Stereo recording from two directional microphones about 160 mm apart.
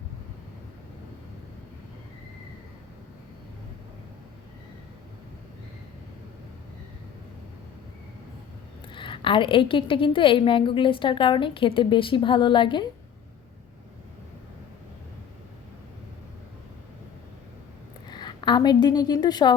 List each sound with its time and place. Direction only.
8.9 s a woman's voice: 30° left (ahead or behind)
18.1 s a woman's voice: 30° left (ahead or behind)